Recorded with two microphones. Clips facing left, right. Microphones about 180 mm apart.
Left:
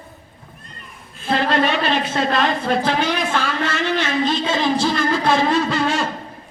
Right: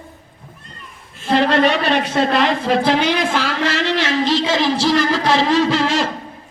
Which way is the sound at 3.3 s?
90° right.